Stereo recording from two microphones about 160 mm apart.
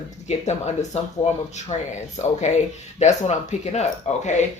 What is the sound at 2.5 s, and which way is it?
Speech, 45° left (ahead or behind).